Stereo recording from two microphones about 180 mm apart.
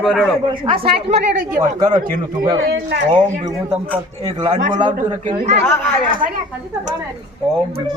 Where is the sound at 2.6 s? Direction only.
65° right (ahead or behind).